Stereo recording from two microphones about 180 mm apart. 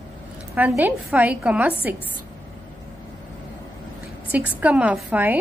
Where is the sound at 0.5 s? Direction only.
10° right (ahead or behind).